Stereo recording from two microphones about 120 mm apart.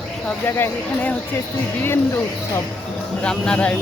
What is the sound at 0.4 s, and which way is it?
Speech, 20° left (ahead or behind).